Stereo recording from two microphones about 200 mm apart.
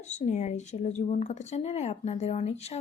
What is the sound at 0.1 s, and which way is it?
Speech, 35° left (ahead or behind).